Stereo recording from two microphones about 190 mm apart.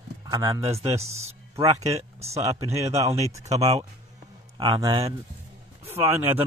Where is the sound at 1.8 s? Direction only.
35° right (ahead or behind).